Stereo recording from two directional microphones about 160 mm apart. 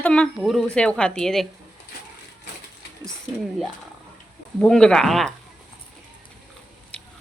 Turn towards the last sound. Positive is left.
turn(degrees=5)  # may be behind; listen again after turning